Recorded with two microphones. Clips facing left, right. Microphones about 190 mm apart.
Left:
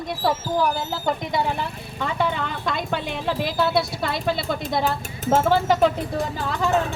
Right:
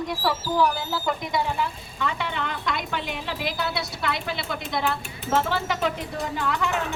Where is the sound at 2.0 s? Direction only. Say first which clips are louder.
Left 4 dB; 45° left (ahead or behind).